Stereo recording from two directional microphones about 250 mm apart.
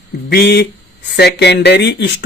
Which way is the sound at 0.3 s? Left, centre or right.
Left.